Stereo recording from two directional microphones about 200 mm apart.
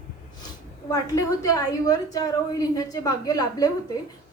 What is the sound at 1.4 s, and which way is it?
A woman's voice, 20° left (ahead or behind).